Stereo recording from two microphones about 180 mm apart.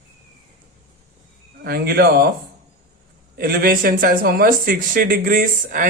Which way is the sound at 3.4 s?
55° right (ahead or behind).